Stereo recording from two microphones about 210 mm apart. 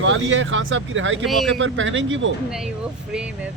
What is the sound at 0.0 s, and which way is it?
Speech, 65° right (ahead or behind).